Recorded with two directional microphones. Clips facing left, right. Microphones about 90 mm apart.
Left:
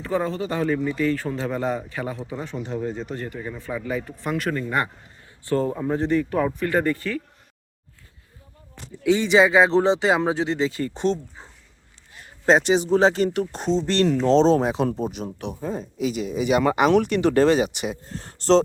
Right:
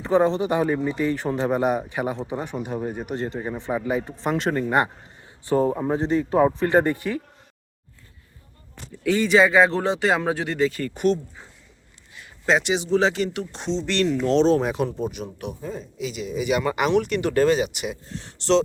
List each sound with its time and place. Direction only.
0.0 s a man's voice: 20° right (ahead or behind)
9.0 s speech: 20° left (ahead or behind)
12.1 s speech: 40° left (ahead or behind)